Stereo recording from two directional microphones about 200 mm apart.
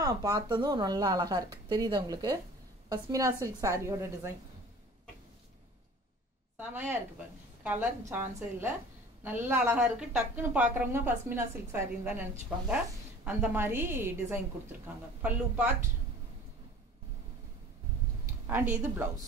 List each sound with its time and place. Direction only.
0.0 s a woman's voice: 15° right (ahead or behind)
6.5 s a woman's voice: 10° right (ahead or behind)
18.2 s a woman's voice: 10° right (ahead or behind)